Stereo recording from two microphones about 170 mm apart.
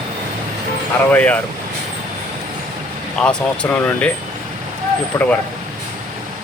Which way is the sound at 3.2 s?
5° left (ahead or behind).